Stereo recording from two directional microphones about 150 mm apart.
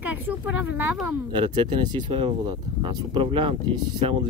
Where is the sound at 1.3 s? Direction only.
35° right (ahead or behind).